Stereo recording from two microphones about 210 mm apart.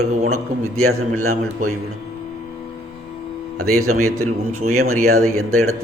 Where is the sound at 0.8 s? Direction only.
90° right.